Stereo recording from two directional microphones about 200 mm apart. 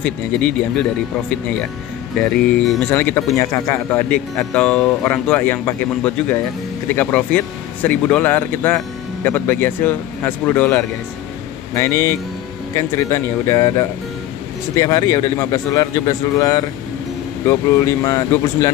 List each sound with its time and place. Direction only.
0.0 s speech: 5° left (ahead or behind)
2.1 s speech: 5° left (ahead or behind)